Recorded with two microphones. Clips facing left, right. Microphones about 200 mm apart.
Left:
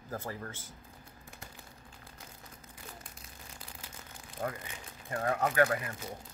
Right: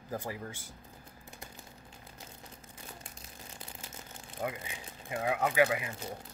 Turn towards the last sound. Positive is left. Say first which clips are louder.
# even
turn(degrees=-10)  # may be behind; listen again after turning